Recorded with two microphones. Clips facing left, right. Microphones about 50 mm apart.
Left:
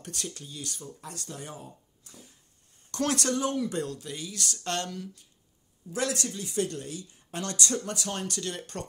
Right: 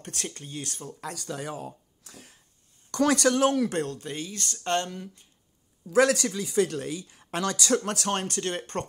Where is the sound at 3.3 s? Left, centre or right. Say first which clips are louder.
Right 6 dB; right.